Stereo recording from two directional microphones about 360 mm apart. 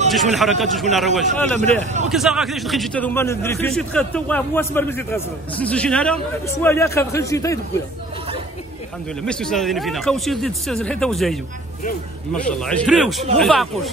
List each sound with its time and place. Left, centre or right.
0.1 s a man's voice: centre
1.6 s a man's voice: centre
2.0 s a man's voice: centre
9.2 s a man's voice: centre